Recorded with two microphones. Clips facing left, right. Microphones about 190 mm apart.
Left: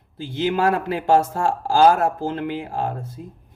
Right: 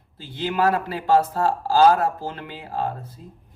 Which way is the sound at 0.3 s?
50° left (ahead or behind).